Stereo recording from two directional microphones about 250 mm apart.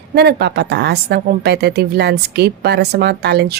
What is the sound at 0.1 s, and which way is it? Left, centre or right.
A woman's voice, right.